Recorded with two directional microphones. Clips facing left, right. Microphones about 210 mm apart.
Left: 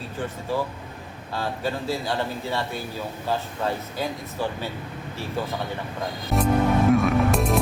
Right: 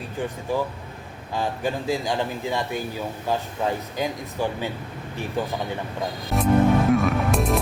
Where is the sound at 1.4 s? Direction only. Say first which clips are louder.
Right 2 dB; 15° right (ahead or behind).